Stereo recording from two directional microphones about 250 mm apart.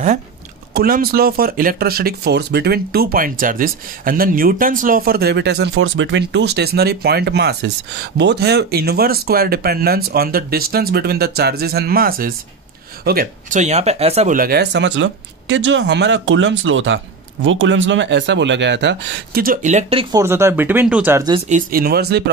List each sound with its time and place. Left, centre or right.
0.7 s speech: right; by 21.4 s centre
21.5 s speech: right